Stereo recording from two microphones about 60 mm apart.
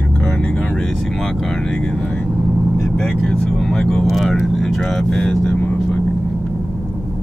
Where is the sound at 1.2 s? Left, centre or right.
Centre.